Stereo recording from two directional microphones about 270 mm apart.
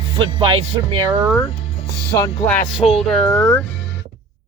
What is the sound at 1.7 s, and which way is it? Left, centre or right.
Music, centre.